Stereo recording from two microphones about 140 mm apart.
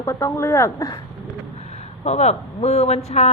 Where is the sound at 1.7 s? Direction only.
50° left (ahead or behind).